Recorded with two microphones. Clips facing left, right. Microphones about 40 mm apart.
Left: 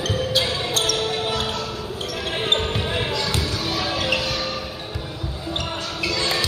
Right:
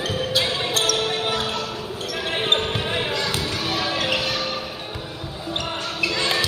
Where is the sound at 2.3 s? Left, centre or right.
Right.